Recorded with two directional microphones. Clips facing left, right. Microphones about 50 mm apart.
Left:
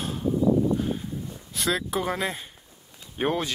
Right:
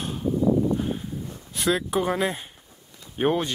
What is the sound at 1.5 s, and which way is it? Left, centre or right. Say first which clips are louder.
Speech: right 3 dB; centre.